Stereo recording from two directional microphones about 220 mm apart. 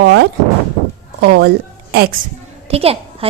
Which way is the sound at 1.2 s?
50° right (ahead or behind).